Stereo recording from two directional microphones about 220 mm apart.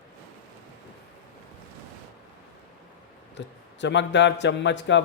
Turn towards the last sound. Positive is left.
turn(degrees=55)  # may be behind; listen again after turning